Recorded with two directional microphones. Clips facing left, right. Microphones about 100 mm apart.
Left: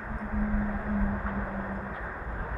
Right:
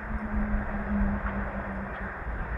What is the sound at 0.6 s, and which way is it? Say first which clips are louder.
Music: even; centre (ahead or behind).